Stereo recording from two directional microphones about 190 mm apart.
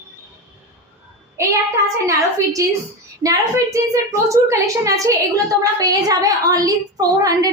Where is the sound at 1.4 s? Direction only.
15° right (ahead or behind).